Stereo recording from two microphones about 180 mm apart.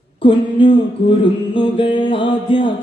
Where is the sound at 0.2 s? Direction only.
30° left (ahead or behind).